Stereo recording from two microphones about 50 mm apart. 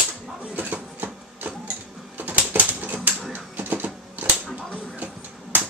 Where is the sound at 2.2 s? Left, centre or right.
Right.